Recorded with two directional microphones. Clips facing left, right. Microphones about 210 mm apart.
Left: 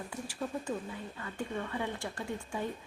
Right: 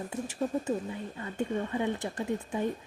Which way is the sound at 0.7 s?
40° right (ahead or behind).